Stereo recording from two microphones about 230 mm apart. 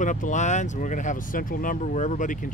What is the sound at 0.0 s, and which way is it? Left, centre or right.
Speech, left.